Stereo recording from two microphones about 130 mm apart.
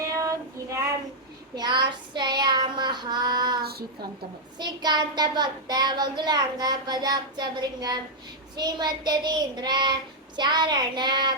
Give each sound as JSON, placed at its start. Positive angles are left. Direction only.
{"t": 0.1, "sound": "child singing", "side_deg": -25}
{"t": 1.5, "sound": "child singing", "side_deg": -35}